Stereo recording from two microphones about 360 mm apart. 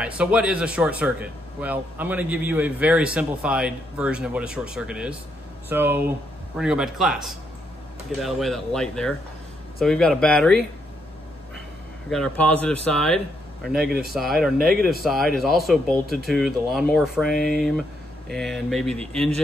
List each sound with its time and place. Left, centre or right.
0.0 s speech: centre
12.1 s speech: centre
13.7 s speech: right
14.1 s speech: centre